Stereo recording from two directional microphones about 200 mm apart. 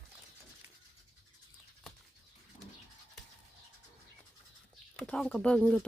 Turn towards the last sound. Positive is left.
turn(degrees=5)  # may be behind; listen again after turning